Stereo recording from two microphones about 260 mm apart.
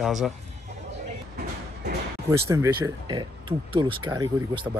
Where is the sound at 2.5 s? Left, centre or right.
Centre.